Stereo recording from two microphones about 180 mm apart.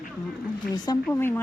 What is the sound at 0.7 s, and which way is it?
Speech, 20° left (ahead or behind).